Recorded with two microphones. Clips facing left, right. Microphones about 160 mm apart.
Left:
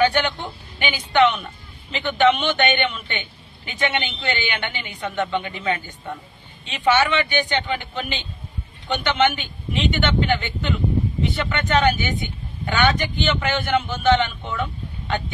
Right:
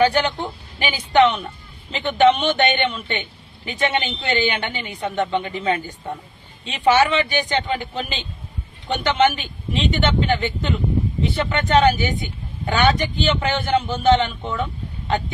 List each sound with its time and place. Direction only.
0.0 s speech: 35° right (ahead or behind)